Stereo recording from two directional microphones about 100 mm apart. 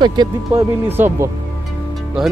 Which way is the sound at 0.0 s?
45° right (ahead or behind).